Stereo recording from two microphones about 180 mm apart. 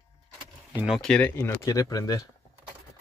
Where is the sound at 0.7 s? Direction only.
5° right (ahead or behind); by 2.3 s 20° left (ahead or behind).